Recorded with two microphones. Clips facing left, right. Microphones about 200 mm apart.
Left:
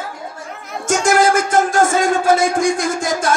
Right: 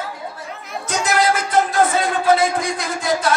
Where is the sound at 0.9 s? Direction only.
45° left (ahead or behind).